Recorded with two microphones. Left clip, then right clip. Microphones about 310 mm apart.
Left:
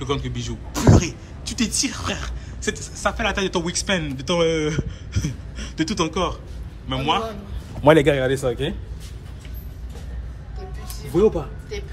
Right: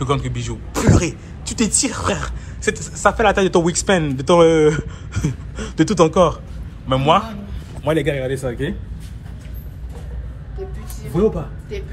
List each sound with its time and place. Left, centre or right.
0.0 s a man's voice: centre
7.8 s speech: left
8.4 s a man's voice: centre